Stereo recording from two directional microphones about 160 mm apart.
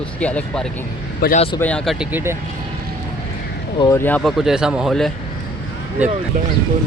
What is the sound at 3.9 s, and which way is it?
Speech, 15° left (ahead or behind).